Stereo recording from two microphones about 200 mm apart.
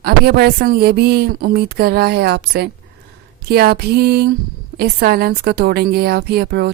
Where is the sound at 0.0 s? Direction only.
50° right (ahead or behind).